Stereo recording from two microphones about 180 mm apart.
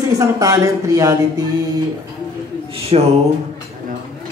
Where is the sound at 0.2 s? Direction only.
20° right (ahead or behind).